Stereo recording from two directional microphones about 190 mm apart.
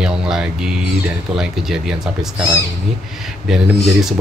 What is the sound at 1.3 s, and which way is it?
Speech, centre (ahead or behind).